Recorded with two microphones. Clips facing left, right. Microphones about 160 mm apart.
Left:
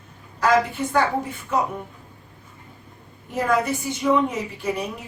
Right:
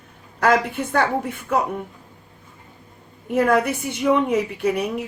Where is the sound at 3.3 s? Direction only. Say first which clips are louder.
Right 4 dB; 60° right (ahead or behind).